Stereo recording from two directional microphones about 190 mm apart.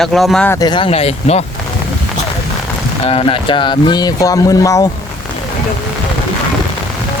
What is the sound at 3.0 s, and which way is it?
Speech, 30° left (ahead or behind).